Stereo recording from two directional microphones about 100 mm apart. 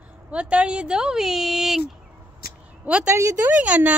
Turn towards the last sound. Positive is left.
turn(degrees=-15)  # may be behind; listen again after turning